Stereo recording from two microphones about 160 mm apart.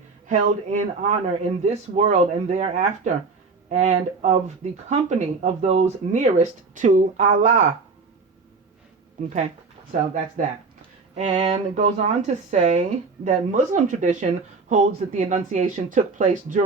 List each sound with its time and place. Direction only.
0.3 s speech: 50° right (ahead or behind)
11.1 s speech: 45° right (ahead or behind)